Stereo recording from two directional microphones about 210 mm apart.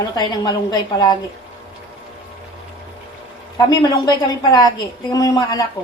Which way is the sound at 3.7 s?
20° left (ahead or behind).